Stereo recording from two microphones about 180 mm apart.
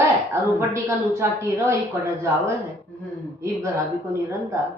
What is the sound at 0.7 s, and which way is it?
A woman's voice, 15° right (ahead or behind).